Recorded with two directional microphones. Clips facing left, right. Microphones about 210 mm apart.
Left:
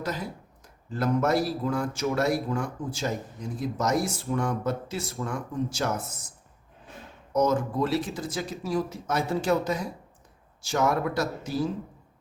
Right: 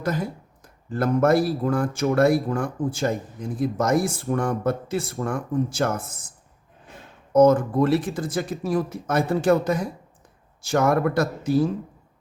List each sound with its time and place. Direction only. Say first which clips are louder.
0.0 s speech: right 6 dB; 50° right (ahead or behind)
7.3 s speech: right 8 dB; 55° right (ahead or behind)